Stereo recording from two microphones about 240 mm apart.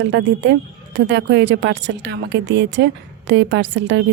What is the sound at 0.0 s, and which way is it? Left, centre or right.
A woman's voice, right.